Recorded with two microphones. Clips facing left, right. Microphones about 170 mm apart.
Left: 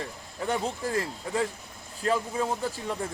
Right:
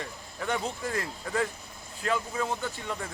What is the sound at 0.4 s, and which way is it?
Speech, 30° left (ahead or behind).